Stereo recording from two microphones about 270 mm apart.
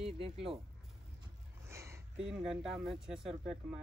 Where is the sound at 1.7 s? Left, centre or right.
Centre.